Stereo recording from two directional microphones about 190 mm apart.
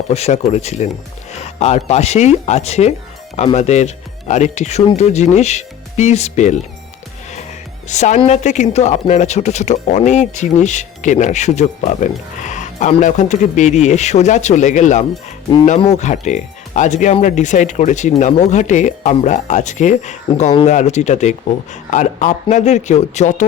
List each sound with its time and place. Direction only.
0.1 s speech: 35° left (ahead or behind)
7.9 s speech: 40° left (ahead or behind)